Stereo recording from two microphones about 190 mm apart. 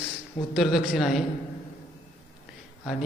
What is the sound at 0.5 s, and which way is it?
Mantra, centre (ahead or behind).